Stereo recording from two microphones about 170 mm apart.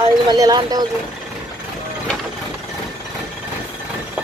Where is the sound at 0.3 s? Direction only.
25° right (ahead or behind).